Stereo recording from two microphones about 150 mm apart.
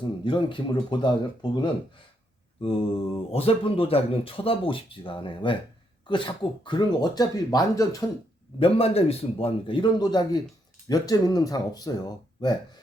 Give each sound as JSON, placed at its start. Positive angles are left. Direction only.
{"t": 0.0, "sound": "speech", "side_deg": 35}
{"t": 8.5, "sound": "speech", "side_deg": 40}